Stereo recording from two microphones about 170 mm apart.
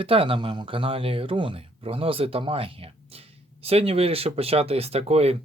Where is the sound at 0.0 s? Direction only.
30° right (ahead or behind).